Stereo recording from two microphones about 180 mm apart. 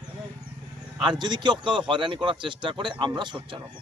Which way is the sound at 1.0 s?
25° right (ahead or behind).